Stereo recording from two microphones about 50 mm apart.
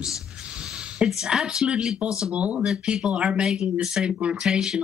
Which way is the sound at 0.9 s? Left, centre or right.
Centre.